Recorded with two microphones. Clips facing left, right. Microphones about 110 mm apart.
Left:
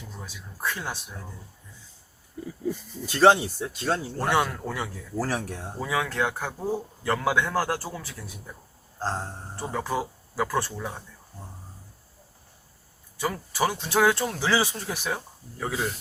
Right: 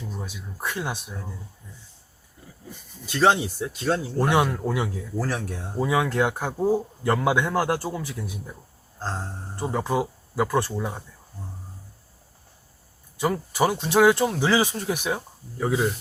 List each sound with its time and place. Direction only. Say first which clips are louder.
0.1 s speech: right 6 dB; 20° right (ahead or behind)
3.1 s speech: left 2 dB; 10° left (ahead or behind)
4.2 s speech: right 4 dB; 15° right (ahead or behind)
5.1 s speech: left 2 dB; 10° left (ahead or behind)
5.8 s speech: right 5 dB; 20° right (ahead or behind)
9.0 s a sound: left 2 dB; 15° left (ahead or behind)
9.6 s speech: right 4 dB; 15° right (ahead or behind)
13.1 s speech: right 4 dB; 20° right (ahead or behind)